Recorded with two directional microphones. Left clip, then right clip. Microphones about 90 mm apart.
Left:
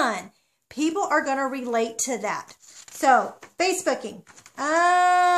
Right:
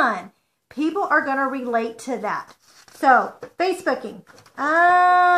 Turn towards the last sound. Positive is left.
turn(degrees=5)  # may be behind; listen again after turning